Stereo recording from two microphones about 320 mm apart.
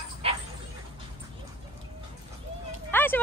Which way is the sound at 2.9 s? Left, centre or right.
Centre.